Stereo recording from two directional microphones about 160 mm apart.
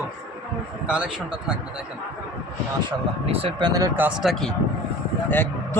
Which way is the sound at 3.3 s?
35° right (ahead or behind).